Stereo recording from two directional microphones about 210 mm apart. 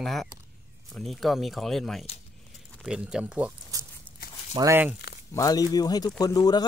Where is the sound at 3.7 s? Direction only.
15° right (ahead or behind).